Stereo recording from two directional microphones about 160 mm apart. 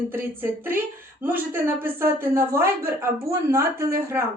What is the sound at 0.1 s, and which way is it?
Speech, 15° right (ahead or behind).